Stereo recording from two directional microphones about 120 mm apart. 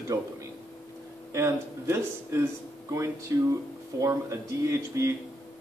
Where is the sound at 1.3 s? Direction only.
20° right (ahead or behind).